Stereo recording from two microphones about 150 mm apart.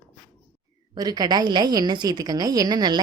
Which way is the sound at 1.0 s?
25° right (ahead or behind).